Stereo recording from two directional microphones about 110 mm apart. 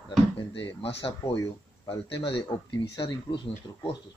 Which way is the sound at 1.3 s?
35° left (ahead or behind).